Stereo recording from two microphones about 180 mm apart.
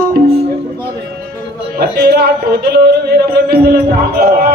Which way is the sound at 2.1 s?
60° right (ahead or behind).